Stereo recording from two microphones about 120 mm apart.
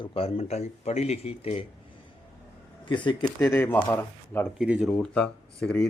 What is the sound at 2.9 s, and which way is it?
Speech, 40° left (ahead or behind).